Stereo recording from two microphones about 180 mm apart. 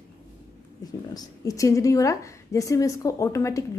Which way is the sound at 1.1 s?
20° left (ahead or behind).